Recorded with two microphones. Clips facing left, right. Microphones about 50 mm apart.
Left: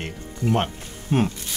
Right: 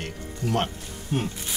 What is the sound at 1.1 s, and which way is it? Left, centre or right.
Speech, left.